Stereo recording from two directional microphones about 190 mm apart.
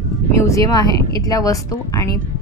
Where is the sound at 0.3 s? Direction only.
15° left (ahead or behind).